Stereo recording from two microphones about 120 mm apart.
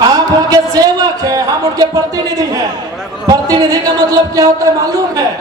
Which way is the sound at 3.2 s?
30° right (ahead or behind).